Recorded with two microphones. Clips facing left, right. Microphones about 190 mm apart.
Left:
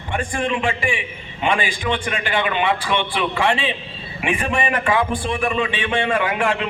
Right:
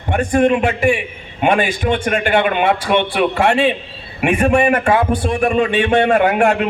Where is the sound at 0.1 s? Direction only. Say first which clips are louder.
Right 9 dB; 45° right (ahead or behind).